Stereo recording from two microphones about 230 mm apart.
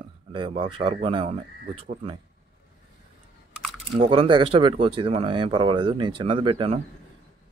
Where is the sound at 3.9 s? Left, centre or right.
Right.